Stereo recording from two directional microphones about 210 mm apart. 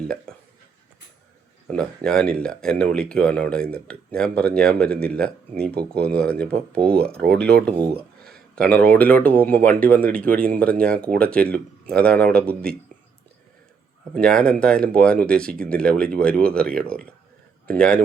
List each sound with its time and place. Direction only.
1.6 s speech: 5° left (ahead or behind)
8.2 s a sound: 5° left (ahead or behind)
8.8 s speech: 5° left (ahead or behind)
10.3 s speech: 45° right (ahead or behind)
10.6 s speech: 5° left (ahead or behind)
14.1 s speech: 5° left (ahead or behind)